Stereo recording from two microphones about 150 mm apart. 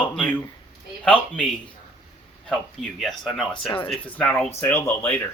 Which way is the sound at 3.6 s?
35° left (ahead or behind).